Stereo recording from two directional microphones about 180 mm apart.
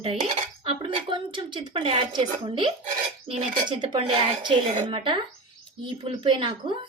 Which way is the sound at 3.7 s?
25° right (ahead or behind).